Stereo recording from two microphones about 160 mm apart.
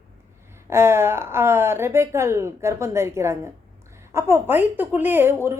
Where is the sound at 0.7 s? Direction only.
15° right (ahead or behind).